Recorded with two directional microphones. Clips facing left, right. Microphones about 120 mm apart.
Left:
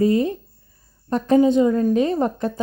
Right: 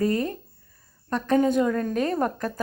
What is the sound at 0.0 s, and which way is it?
Speech, 45° right (ahead or behind).